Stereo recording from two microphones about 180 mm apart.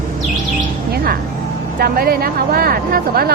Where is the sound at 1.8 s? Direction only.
55° right (ahead or behind).